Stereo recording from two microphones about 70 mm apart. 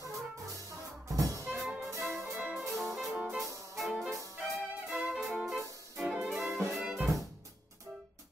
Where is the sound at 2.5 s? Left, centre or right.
Centre.